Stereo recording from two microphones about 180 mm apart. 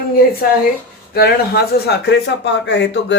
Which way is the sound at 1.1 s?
60° left (ahead or behind).